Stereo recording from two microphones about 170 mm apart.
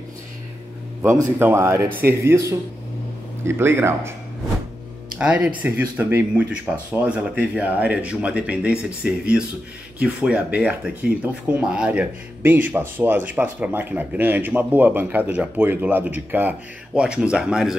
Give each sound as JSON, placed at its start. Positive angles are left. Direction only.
{"t": 1.0, "sound": "speech", "side_deg": -15}
{"t": 5.2, "sound": "speech", "side_deg": -5}